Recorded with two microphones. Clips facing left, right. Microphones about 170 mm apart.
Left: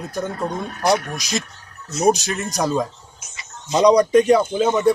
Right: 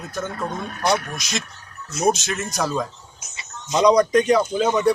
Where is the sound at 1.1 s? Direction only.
35° left (ahead or behind).